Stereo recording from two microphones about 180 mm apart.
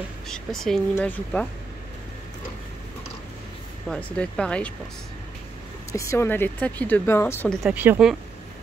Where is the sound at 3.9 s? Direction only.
5° left (ahead or behind).